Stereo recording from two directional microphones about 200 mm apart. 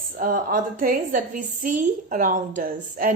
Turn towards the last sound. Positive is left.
turn(degrees=-45)  # may be behind; listen again after turning